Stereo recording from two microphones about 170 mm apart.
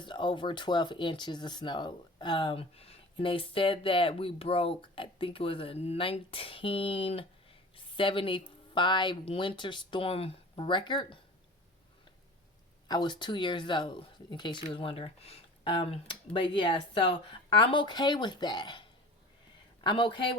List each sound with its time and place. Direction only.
0.0 s speech: 30° left (ahead or behind)
12.9 s speech: 25° left (ahead or behind)